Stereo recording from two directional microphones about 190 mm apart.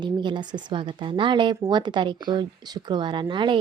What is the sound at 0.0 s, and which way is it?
A woman's voice, 25° right (ahead or behind).